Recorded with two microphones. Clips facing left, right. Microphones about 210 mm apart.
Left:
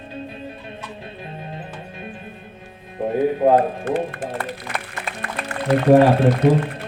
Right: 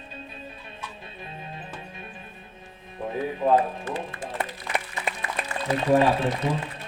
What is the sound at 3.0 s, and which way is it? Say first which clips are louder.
Speech: left 8 dB; 60° left (ahead or behind).